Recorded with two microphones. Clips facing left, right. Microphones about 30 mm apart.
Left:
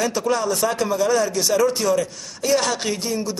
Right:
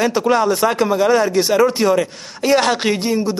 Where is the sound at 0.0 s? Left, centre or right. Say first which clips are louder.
Right 6 dB; right.